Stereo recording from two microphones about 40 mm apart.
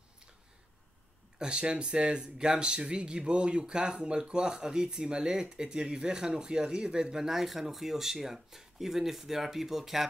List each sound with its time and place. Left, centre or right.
1.4 s speech: right; by 10.0 s centre